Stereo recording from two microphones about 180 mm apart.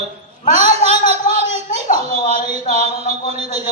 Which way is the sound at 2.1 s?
35° right (ahead or behind).